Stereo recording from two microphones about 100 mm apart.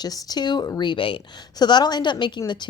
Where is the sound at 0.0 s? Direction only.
40° left (ahead or behind).